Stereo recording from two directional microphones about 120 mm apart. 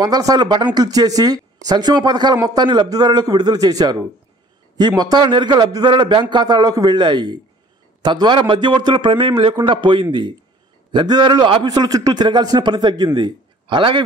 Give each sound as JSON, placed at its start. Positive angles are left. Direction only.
{"t": 0.0, "sound": "a man's voice", "side_deg": -35}